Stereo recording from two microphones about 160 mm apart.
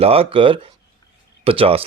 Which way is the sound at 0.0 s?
35° right (ahead or behind).